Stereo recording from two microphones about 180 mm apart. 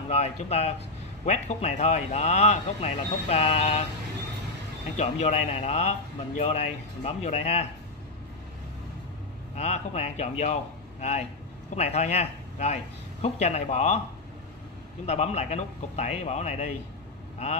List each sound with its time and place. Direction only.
0.1 s a man's voice: 40° left (ahead or behind)
4.9 s a man's voice: 40° left (ahead or behind)
9.6 s a man's voice: 40° left (ahead or behind)
15.0 s a man's voice: 40° left (ahead or behind)